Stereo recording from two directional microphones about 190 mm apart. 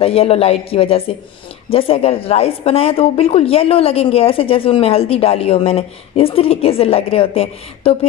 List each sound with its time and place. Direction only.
0.0 s speech: 30° left (ahead or behind)